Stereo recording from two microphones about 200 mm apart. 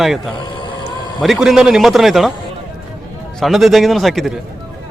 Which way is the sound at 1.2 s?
Centre (ahead or behind).